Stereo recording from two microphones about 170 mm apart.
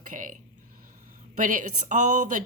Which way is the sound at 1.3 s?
50° right (ahead or behind).